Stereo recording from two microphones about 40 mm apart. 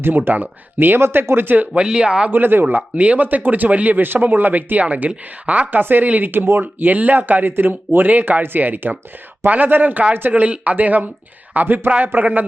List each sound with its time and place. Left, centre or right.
0.0 s speech: right
0.9 s speech: right
1.8 s speech: right
2.3 s speech: right
2.7 s speech: right
4.0 s speech: right
4.4 s speech: right
5.8 s speech: right
9.9 s speech: right